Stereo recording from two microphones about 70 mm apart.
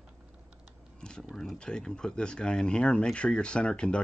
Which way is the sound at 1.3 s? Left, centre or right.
Centre.